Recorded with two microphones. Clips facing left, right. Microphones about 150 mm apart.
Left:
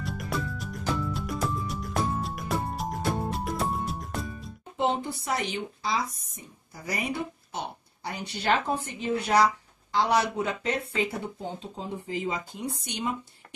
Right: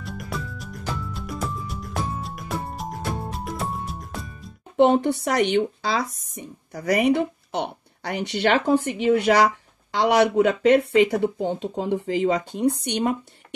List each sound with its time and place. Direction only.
0.0 s music: centre (ahead or behind)
4.7 s speech: 65° right (ahead or behind)